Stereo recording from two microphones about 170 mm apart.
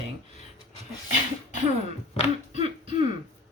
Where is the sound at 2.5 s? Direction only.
30° right (ahead or behind).